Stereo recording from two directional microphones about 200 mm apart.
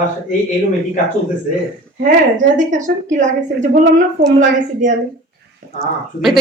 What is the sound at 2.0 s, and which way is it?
A woman's voice, 40° right (ahead or behind).